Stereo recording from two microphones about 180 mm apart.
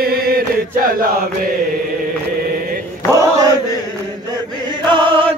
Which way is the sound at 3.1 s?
20° right (ahead or behind).